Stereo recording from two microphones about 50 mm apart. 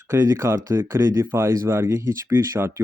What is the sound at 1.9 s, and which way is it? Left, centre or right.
Speech, right.